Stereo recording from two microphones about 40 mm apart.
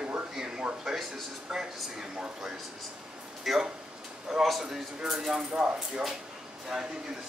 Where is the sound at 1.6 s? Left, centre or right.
Centre.